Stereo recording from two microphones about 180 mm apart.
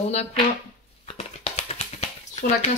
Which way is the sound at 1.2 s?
35° left (ahead or behind).